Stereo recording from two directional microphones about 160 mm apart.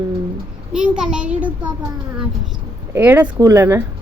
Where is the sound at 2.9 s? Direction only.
10° right (ahead or behind).